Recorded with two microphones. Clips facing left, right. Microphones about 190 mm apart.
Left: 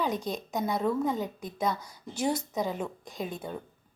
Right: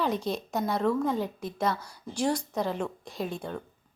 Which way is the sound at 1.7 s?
20° left (ahead or behind).